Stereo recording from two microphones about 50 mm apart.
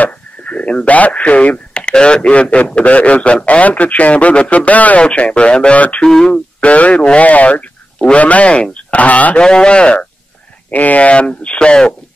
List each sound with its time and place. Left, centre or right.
0.0 s speech: left
6.0 s speech: centre
6.6 s speech: left
9.4 s speech: centre